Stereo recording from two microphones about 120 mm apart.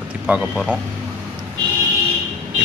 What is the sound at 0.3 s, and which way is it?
Speech, 10° right (ahead or behind).